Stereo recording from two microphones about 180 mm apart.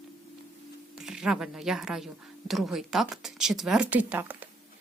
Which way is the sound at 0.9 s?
5° right (ahead or behind).